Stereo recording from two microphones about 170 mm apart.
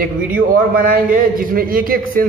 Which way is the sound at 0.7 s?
60° right (ahead or behind).